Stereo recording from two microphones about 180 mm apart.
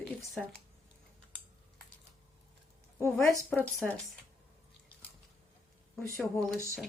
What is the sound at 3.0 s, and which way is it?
Speech, 15° left (ahead or behind).